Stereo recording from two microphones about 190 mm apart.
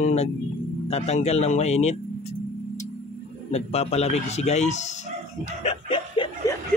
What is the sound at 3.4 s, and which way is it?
Speech, 35° left (ahead or behind).